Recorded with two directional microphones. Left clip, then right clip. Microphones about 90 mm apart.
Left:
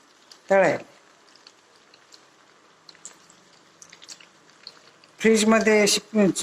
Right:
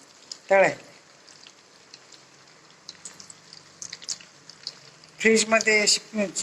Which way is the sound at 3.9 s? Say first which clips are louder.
Right 8 dB; 30° left (ahead or behind).